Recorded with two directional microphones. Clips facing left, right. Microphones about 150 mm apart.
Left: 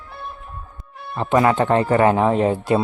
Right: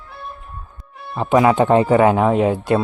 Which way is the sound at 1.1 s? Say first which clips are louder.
Right 2 dB; 5° right (ahead or behind).